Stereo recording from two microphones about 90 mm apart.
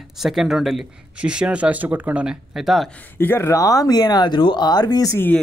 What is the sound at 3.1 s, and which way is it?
Speech, 25° left (ahead or behind).